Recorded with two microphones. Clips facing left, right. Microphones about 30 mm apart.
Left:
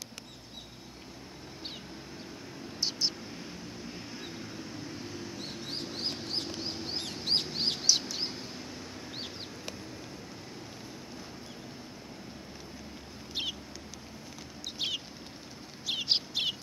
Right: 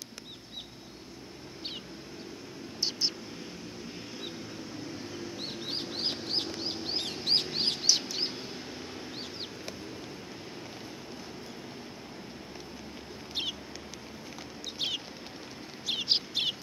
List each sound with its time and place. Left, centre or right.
2.8 s vehicle: centre
4.8 s a sound: centre
5.4 s bird: right
6.2 s chicken: right
6.9 s bird: right
7.2 s fowl: centre
7.7 s bird: centre
13.3 s a sound: centre
14.8 s bird: centre